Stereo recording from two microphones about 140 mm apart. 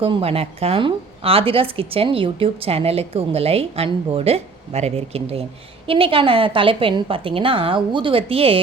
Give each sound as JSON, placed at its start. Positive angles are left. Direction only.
{"t": 0.0, "sound": "a woman's voice", "side_deg": -40}